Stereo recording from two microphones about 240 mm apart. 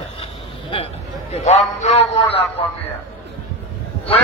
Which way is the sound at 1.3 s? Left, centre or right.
Left.